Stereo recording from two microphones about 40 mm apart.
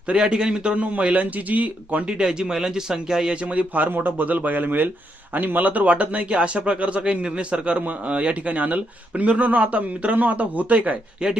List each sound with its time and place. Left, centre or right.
0.1 s a man's voice: right
0.8 s speech: right
2.0 s speech: right
3.4 s speech: right
3.8 s a man's voice: right